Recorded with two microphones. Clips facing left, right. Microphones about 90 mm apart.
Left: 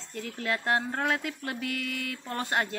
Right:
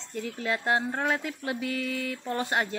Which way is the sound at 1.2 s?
15° right (ahead or behind).